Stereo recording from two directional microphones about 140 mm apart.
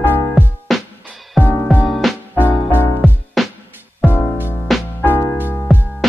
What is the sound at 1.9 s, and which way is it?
Music, centre (ahead or behind).